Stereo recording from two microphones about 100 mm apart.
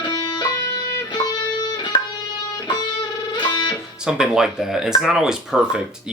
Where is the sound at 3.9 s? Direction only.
10° right (ahead or behind).